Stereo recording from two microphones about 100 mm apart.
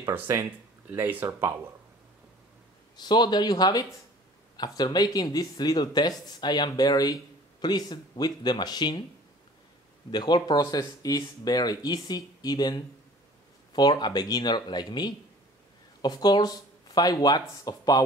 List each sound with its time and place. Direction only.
0.1 s speech: 25° right (ahead or behind)
3.0 s speech: 45° left (ahead or behind)
10.1 s speech: 45° left (ahead or behind)